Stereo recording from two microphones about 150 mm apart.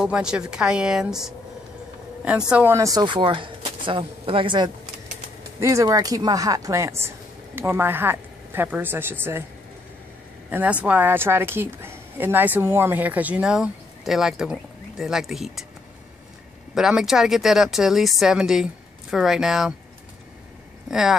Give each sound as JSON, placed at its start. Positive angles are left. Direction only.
{"t": 0.0, "sound": "speech", "side_deg": -5}
{"t": 5.6, "sound": "a woman's voice", "side_deg": -20}
{"t": 10.5, "sound": "a woman's voice", "side_deg": -10}
{"t": 16.7, "sound": "speech", "side_deg": -5}
{"t": 20.9, "sound": "speech", "side_deg": -5}